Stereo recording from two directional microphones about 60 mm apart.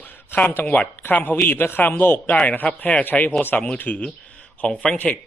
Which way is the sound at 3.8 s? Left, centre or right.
Left.